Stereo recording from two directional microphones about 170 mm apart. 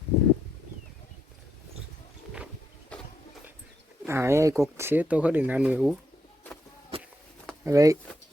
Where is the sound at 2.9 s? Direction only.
5° left (ahead or behind).